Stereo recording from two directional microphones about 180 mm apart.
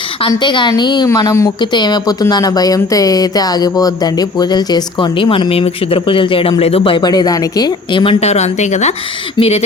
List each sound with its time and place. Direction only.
0.2 s a woman's voice: 25° left (ahead or behind)